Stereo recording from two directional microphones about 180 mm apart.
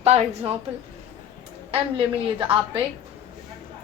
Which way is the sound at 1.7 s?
30° right (ahead or behind).